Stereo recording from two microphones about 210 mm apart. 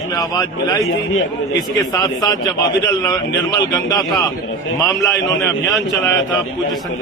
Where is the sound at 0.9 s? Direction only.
70° left (ahead or behind).